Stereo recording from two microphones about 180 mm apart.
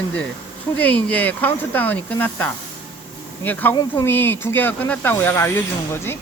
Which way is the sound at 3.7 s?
20° left (ahead or behind).